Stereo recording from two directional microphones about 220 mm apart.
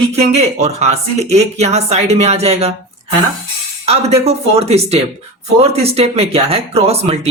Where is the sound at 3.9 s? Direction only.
30° right (ahead or behind).